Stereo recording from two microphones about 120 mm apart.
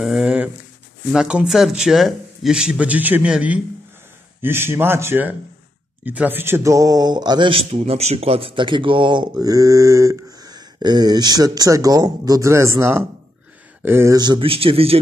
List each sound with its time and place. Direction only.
0.0 s speech: 5° right (ahead or behind); by 14.1 s 20° right (ahead or behind)
14.1 s speech: 35° right (ahead or behind); by 15.0 s 50° right (ahead or behind)